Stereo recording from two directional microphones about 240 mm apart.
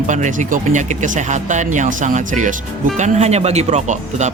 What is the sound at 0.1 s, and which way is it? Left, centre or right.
Speech, right.